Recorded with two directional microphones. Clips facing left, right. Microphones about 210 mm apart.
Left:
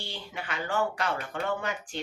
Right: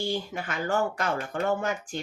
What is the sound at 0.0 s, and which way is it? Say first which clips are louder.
Speech: right 9 dB; 45° right (ahead or behind).